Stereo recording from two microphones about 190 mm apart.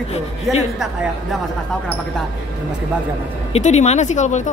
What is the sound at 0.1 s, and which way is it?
Speech, 35° left (ahead or behind).